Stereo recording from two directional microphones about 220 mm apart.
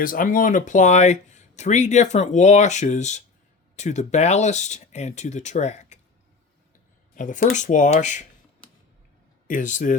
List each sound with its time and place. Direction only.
0.0 s speech: 40° left (ahead or behind)
7.2 s speech: 35° left (ahead or behind)
9.5 s speech: 35° left (ahead or behind)